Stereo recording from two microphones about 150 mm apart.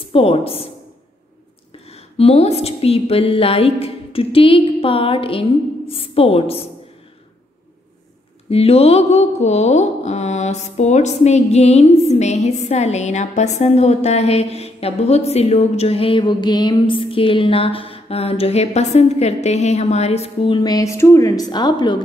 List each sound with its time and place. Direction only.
0.1 s a woman's voice: 40° left (ahead or behind)
1.9 s a woman's voice: 40° left (ahead or behind)
8.5 s a sound: 40° left (ahead or behind)